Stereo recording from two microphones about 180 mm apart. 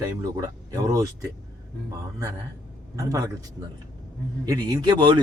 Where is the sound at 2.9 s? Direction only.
20° right (ahead or behind).